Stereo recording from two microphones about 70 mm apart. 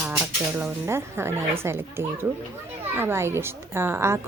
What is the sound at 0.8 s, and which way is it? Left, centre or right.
A woman's voice, right.